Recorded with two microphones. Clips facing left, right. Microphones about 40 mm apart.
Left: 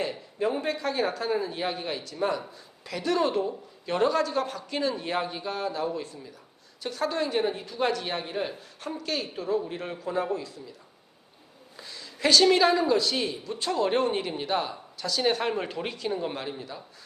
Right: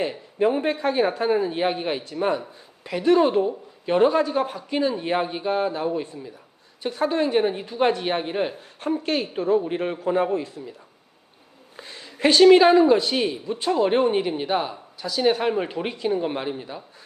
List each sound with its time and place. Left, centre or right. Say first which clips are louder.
0.0 s a woman's voice: right 6 dB; right
11.8 s a woman's voice: right 6 dB; right